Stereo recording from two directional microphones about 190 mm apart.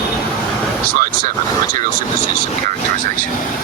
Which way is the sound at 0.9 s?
50° right (ahead or behind).